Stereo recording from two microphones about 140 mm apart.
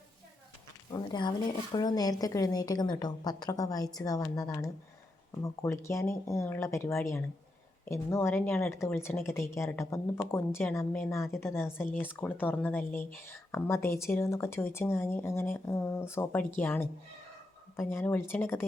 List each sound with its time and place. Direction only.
0.9 s a woman's voice: 30° left (ahead or behind)